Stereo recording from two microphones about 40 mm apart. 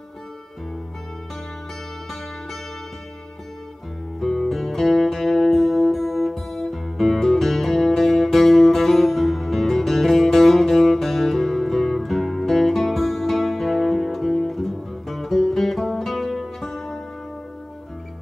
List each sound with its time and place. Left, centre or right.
4.2 s music: centre